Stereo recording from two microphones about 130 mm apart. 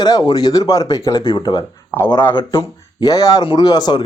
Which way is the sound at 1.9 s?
15° left (ahead or behind).